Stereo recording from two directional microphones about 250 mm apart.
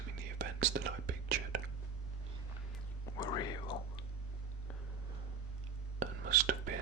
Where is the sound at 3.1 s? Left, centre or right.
Centre.